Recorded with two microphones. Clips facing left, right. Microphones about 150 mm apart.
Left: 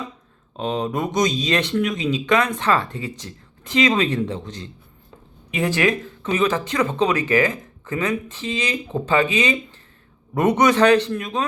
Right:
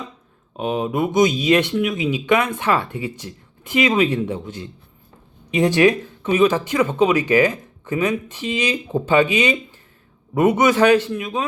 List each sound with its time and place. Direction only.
0.5 s a man's voice: 10° right (ahead or behind)